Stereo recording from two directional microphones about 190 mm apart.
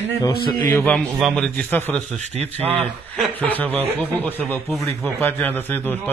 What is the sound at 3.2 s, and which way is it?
Speech, 10° left (ahead or behind).